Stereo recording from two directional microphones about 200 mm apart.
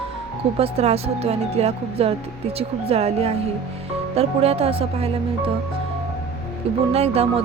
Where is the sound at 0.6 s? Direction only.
30° right (ahead or behind).